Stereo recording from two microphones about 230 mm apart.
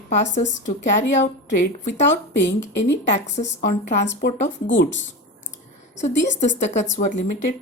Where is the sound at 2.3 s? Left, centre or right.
Left.